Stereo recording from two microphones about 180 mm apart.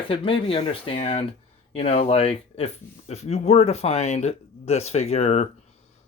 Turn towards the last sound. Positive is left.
turn(degrees=35)  # may be behind; listen again after turning